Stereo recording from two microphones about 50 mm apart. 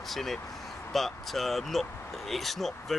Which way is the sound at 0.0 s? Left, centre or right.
Centre.